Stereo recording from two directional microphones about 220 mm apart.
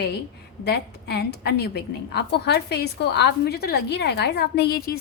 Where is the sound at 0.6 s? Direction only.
50° left (ahead or behind).